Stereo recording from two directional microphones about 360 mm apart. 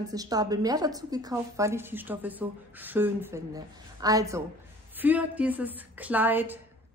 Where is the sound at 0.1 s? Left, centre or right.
Centre.